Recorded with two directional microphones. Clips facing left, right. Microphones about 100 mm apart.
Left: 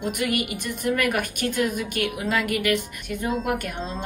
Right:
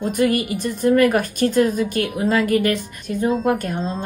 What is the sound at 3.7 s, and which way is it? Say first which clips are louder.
Speech: right 6 dB; 40° right (ahead or behind).